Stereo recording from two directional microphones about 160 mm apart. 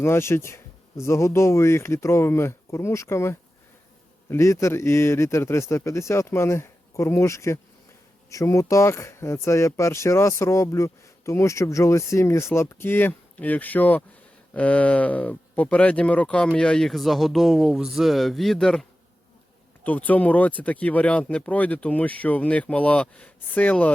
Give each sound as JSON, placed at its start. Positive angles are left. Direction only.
{"t": 0.0, "sound": "speech", "side_deg": 15}